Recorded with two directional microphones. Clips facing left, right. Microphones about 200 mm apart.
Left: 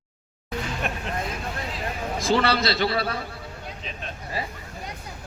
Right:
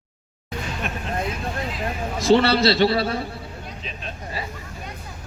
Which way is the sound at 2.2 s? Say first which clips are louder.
Right 6 dB; 30° right (ahead or behind).